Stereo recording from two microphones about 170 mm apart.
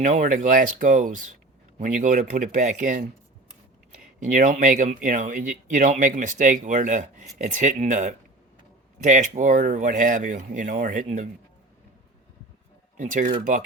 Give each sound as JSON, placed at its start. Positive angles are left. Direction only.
{"t": 0.0, "sound": "speech", "side_deg": -50}
{"t": 4.2, "sound": "speech", "side_deg": -45}
{"t": 13.0, "sound": "speech", "side_deg": -50}